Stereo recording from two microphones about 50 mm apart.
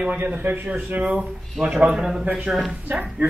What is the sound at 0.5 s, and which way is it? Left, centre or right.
Speech, right.